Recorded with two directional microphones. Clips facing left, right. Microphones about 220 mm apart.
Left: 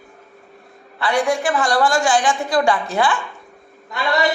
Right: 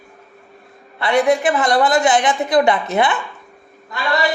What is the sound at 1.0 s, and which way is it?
Speech, 20° right (ahead or behind).